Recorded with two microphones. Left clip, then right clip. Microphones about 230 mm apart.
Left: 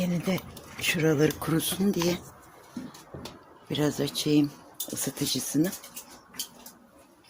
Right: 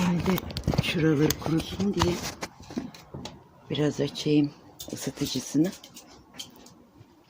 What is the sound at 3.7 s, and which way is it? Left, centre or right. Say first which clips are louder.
Speech: right 1 dB; centre.